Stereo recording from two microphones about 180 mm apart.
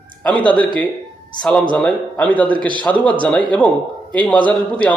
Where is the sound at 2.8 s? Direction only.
5° left (ahead or behind).